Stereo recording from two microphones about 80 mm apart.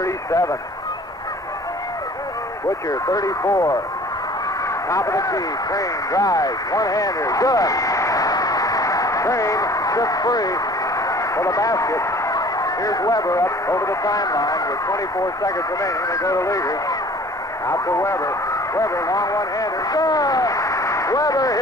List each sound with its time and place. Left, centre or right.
0.0 s speech: left
2.9 s speech: left
4.8 s speech: left